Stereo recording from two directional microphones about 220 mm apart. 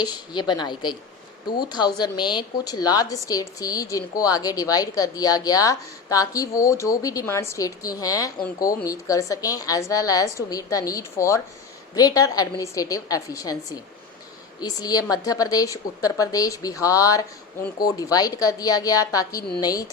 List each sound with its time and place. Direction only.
0.0 s a woman's voice: 20° left (ahead or behind)
14.6 s speech: 15° left (ahead or behind)